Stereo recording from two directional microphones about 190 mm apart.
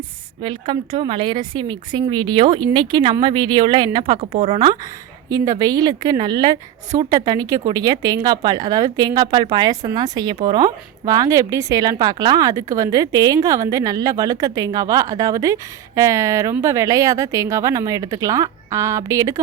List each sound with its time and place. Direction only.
0.4 s speech: 25° right (ahead or behind)
5.3 s speech: 20° right (ahead or behind)